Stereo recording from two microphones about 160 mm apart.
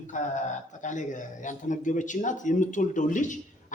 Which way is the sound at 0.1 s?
50° left (ahead or behind).